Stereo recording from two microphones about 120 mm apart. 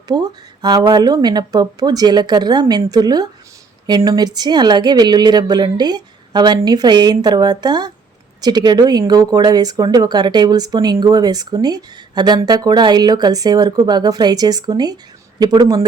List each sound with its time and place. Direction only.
0.1 s speech: 35° right (ahead or behind)